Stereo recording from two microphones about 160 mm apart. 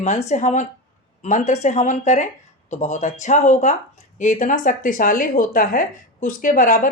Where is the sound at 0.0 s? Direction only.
45° left (ahead or behind).